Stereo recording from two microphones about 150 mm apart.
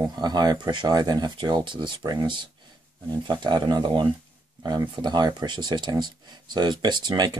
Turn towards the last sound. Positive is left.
turn(degrees=-30)  # may be behind; listen again after turning